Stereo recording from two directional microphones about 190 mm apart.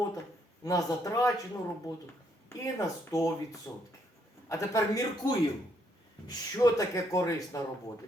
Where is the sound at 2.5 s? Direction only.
15° left (ahead or behind).